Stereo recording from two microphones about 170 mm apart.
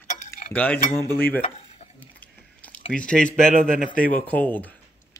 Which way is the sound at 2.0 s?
10° left (ahead or behind).